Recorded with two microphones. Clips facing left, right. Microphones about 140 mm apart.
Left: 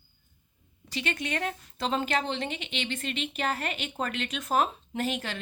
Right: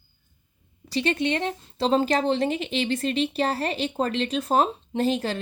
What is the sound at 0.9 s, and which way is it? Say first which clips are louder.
Speech: right 8 dB; 30° right (ahead or behind).